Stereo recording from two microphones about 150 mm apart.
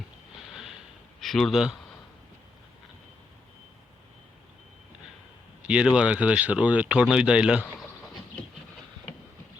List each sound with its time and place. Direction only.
0.5 s snort: 5° right (ahead or behind)
1.2 s a man's voice: centre (ahead or behind)
5.6 s speech: 5° right (ahead or behind)